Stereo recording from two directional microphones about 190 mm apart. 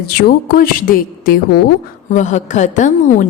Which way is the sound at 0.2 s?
55° left (ahead or behind).